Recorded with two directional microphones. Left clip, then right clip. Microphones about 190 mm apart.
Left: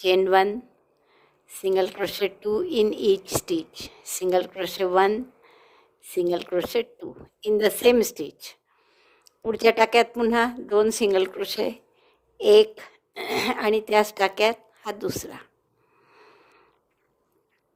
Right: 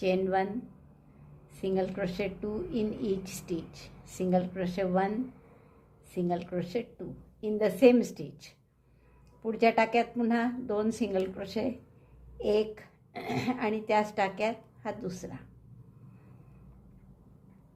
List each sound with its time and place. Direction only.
0.0 s a woman's voice: 50° left (ahead or behind)
1.7 s a woman's voice: 50° left (ahead or behind)